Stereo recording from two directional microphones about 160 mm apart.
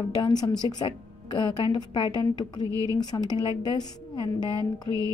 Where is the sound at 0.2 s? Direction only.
25° left (ahead or behind).